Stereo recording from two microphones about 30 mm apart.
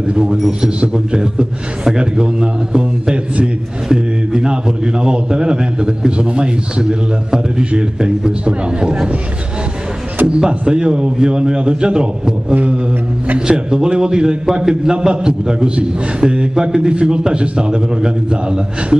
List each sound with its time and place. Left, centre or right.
0.0 s a man's voice: right
10.2 s a man's voice: right